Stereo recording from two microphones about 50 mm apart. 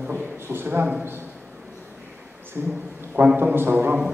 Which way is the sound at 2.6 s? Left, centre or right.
Right.